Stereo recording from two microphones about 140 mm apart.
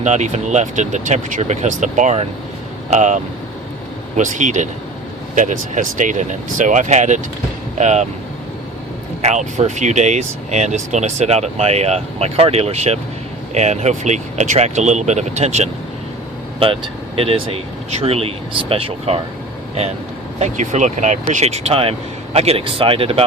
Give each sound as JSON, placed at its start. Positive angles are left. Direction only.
{"t": 0.0, "sound": "speech", "side_deg": -55}
{"t": 4.2, "sound": "speech", "side_deg": -60}
{"t": 9.2, "sound": "speech", "side_deg": -60}
{"t": 16.6, "sound": "speech", "side_deg": -40}
{"t": 20.4, "sound": "speech", "side_deg": -55}